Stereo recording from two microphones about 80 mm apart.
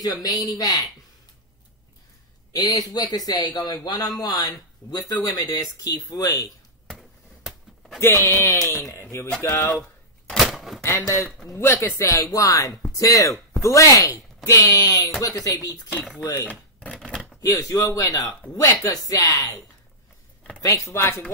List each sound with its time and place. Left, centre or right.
0.0 s speech: left
2.5 s a man's voice: left
6.9 s a sound: centre
8.0 s speech: left
10.2 s a sound: centre
10.8 s speech: left
16.4 s a sound: centre
17.4 s speech: left
20.6 s speech: left